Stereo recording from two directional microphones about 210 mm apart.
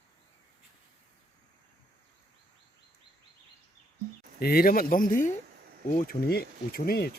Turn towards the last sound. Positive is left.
turn(degrees=45)  # may be behind; listen again after turning